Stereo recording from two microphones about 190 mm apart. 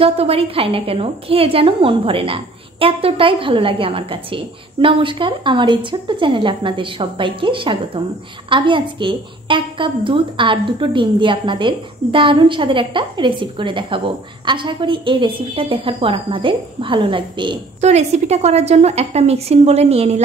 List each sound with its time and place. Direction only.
0.0 s a woman's voice: 30° right (ahead or behind)